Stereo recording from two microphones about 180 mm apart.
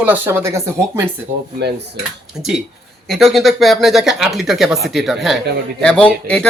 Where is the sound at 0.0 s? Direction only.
10° right (ahead or behind).